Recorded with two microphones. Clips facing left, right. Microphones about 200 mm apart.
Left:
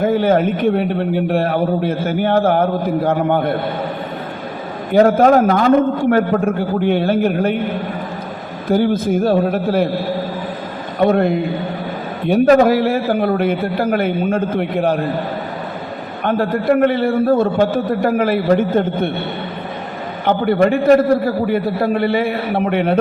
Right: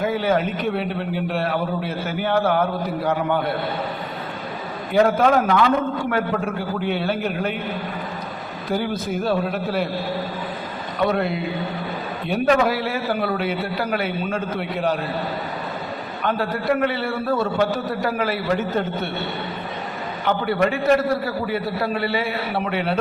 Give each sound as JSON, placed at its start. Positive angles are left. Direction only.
{"t": 0.0, "sound": "a man's voice", "side_deg": 50}
{"t": 4.9, "sound": "a man's voice", "side_deg": 40}
{"t": 8.6, "sound": "a man's voice", "side_deg": 45}
{"t": 11.0, "sound": "a man's voice", "side_deg": 50}
{"t": 16.2, "sound": "a man's voice", "side_deg": 50}
{"t": 20.2, "sound": "a man's voice", "side_deg": 50}